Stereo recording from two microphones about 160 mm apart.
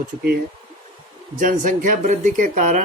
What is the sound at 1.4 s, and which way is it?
Speech, 55° right (ahead or behind).